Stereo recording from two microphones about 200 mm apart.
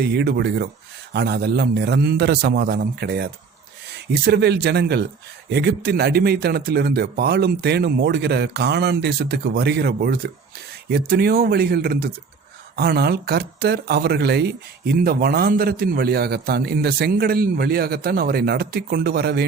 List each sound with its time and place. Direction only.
0.0 s a man's voice: 55° right (ahead or behind)